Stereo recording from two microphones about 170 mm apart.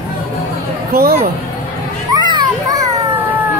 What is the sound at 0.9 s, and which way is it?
Speech, 60° right (ahead or behind).